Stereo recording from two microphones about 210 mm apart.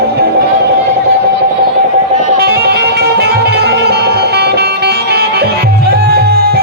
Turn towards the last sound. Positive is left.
turn(degrees=-50)  # may be behind; listen again after turning